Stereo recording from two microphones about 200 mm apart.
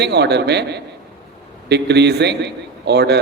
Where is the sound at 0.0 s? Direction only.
55° right (ahead or behind).